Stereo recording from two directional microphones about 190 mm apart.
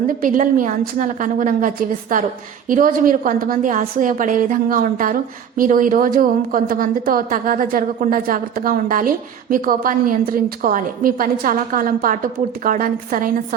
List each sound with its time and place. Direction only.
0.1 s a woman's voice: 45° right (ahead or behind)